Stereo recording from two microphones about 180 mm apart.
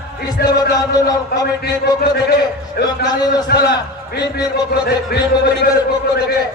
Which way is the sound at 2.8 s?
60° left (ahead or behind).